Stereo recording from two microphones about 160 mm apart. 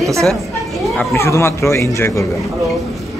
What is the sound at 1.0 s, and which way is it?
Speech, 15° left (ahead or behind).